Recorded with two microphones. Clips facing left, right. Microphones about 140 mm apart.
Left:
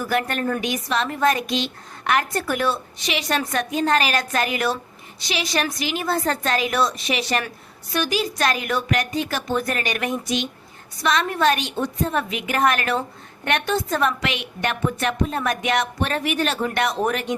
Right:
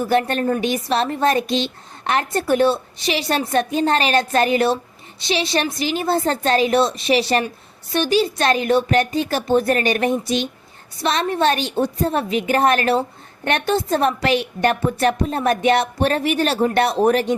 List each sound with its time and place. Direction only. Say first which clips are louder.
0.0 s a woman's voice: right 5 dB; 30° right (ahead or behind)